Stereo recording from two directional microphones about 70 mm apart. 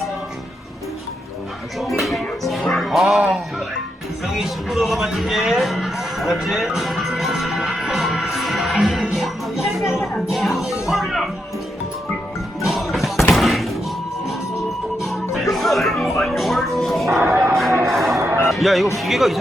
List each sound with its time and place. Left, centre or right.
2.0 s music: centre
3.2 s a man's voice: centre
4.3 s music: centre
12.6 s music: centre
15.0 s music: centre
17.2 s music: right
17.8 s music: centre